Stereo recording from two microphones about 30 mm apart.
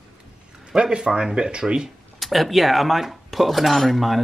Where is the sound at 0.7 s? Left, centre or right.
Right.